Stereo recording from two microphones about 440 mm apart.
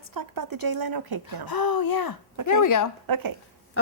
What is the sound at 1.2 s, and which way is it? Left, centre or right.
Speech, left.